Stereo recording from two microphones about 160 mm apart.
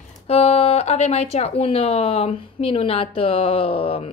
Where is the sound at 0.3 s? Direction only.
40° left (ahead or behind).